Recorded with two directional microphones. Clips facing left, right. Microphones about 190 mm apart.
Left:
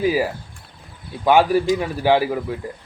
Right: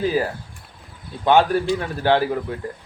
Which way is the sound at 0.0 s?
10° left (ahead or behind).